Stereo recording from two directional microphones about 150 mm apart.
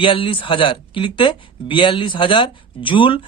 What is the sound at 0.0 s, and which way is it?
Speech, 35° left (ahead or behind).